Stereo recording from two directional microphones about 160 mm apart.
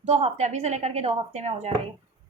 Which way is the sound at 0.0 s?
40° right (ahead or behind).